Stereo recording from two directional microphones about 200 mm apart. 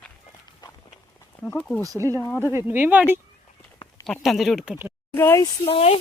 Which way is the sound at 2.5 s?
10° right (ahead or behind).